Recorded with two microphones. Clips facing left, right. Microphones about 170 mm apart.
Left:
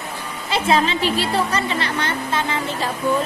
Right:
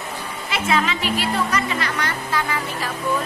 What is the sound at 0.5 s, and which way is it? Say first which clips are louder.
Speech: left 3 dB; 30° left (ahead or behind).